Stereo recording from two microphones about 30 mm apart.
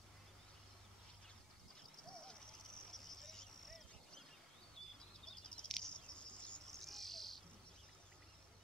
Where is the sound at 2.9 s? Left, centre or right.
Centre.